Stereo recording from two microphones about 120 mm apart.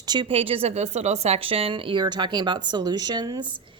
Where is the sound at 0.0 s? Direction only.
35° right (ahead or behind).